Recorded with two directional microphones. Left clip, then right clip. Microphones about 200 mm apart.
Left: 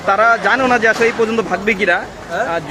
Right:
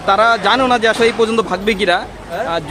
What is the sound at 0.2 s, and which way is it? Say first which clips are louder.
Speech: even; 10° right (ahead or behind).